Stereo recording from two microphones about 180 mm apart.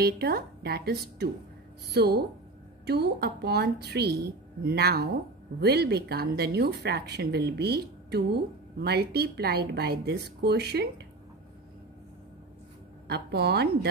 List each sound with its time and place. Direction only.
0.0 s a woman's voice: 60° right (ahead or behind)
13.1 s a woman's voice: 65° right (ahead or behind)